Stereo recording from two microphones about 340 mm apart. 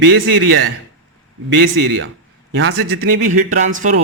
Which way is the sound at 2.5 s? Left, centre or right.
Right.